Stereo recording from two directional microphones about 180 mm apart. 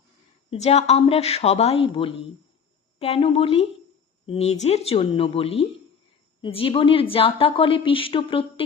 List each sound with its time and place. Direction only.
0.5 s a woman's voice: 35° left (ahead or behind)